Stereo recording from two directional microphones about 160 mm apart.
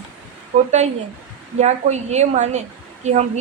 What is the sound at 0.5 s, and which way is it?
A woman's voice, 45° right (ahead or behind).